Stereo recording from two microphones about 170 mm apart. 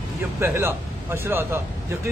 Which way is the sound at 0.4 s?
15° right (ahead or behind).